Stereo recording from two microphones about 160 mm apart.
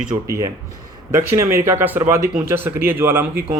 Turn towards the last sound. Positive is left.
turn(degrees=-15)  # may be behind; listen again after turning